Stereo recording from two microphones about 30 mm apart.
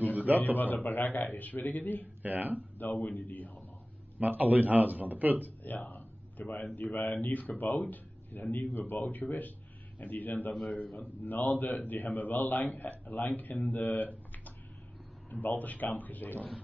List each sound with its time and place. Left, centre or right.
0.6 s speech: left
2.2 s a man's voice: right
2.8 s speech: left
4.2 s a man's voice: right
5.6 s a sound: left
6.6 s speech: left
10.5 s speech: left
15.3 s speech: left